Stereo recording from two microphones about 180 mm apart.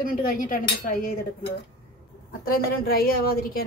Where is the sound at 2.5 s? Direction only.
55° left (ahead or behind).